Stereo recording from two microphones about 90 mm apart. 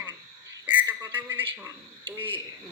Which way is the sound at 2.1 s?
70° right (ahead or behind).